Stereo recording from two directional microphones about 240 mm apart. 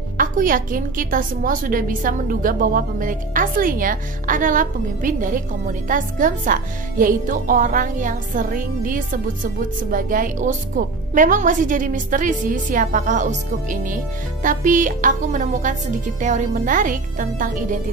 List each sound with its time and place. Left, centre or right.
0.2 s a woman's voice: right